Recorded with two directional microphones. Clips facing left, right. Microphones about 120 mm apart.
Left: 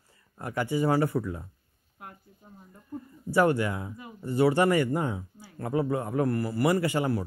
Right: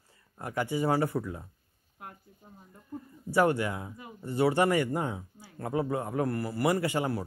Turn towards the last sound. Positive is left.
turn(degrees=-20)  # may be behind; listen again after turning